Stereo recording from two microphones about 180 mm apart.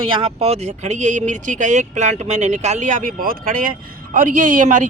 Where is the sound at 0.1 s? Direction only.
30° right (ahead or behind).